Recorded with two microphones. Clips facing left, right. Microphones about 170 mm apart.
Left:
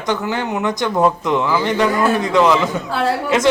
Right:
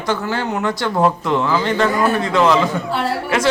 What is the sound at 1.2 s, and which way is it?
A man's voice, 15° left (ahead or behind).